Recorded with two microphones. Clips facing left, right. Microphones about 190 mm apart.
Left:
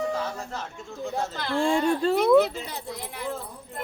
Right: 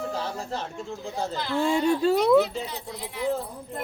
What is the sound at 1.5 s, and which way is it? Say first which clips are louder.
Speech: even; 5° right (ahead or behind).